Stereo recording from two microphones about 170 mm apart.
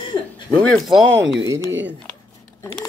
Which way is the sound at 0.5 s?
5° left (ahead or behind).